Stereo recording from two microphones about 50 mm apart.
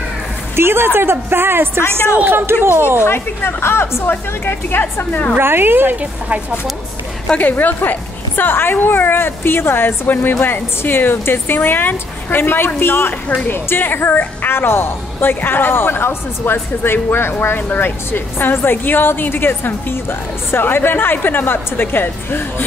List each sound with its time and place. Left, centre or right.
0.6 s a woman's voice: right
3.0 s a woman's voice: left
5.4 s a woman's voice: right
7.3 s a woman's voice: left